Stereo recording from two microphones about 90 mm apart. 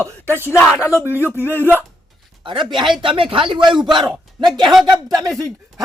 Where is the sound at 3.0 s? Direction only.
75° right (ahead or behind).